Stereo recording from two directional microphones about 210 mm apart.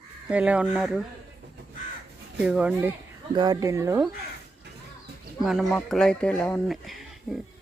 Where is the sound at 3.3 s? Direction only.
20° right (ahead or behind).